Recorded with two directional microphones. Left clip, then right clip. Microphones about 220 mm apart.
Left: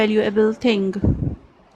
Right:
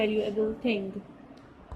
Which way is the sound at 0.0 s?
40° left (ahead or behind).